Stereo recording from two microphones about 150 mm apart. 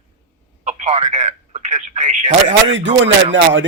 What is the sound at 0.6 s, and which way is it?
A man's voice, 50° right (ahead or behind).